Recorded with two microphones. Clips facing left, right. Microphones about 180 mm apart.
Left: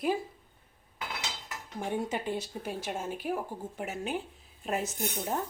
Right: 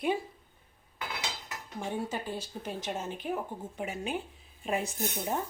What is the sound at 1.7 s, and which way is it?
Speech, 15° left (ahead or behind).